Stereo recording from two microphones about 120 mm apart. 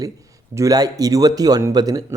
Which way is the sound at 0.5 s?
30° right (ahead or behind).